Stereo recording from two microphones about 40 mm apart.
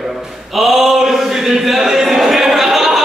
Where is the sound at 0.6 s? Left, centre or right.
Centre.